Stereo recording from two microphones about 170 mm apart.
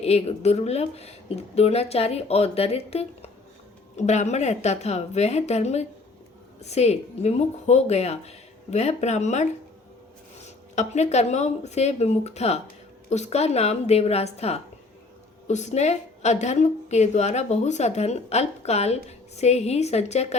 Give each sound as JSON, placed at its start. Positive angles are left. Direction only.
{"t": 0.0, "sound": "a woman's voice", "side_deg": 40}
{"t": 10.8, "sound": "a woman's voice", "side_deg": 40}